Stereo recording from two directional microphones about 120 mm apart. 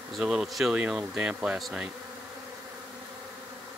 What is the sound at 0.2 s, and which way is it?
Speech, 5° right (ahead or behind).